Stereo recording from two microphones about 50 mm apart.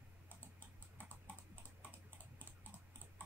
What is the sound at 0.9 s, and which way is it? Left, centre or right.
Typing, left.